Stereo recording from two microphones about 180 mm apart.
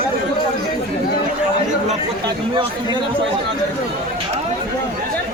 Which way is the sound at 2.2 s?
30° right (ahead or behind).